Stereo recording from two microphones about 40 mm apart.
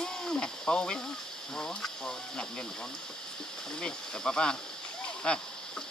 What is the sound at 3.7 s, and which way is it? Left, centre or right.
Speech, centre.